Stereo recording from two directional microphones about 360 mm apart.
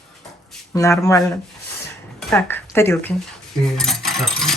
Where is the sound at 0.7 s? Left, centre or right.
Centre.